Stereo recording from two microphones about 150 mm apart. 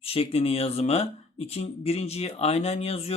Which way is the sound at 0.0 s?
40° left (ahead or behind).